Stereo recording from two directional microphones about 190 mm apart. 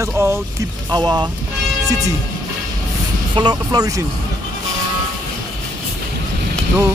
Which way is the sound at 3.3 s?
20° right (ahead or behind).